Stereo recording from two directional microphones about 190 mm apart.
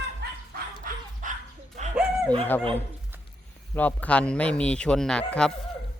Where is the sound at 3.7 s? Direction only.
10° left (ahead or behind).